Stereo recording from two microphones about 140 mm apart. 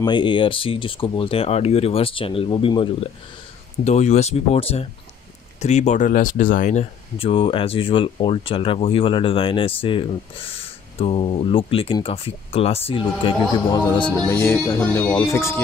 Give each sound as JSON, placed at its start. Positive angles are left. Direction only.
{"t": 0.0, "sound": "speech", "side_deg": 35}
{"t": 3.8, "sound": "speech", "side_deg": 55}
{"t": 13.5, "sound": "a man's voice", "side_deg": 30}
{"t": 14.0, "sound": "speech", "side_deg": 10}